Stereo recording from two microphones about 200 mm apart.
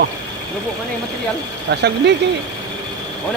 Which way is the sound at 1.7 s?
60° right (ahead or behind).